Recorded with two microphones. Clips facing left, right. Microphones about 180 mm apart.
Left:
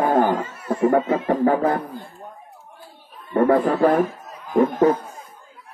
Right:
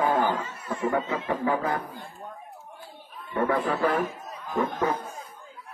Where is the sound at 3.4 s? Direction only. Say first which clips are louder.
Left 8 dB; 45° left (ahead or behind).